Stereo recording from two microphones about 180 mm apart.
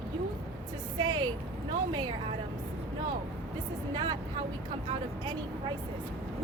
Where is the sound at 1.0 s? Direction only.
25° right (ahead or behind).